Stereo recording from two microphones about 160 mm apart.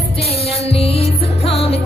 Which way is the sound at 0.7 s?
40° left (ahead or behind).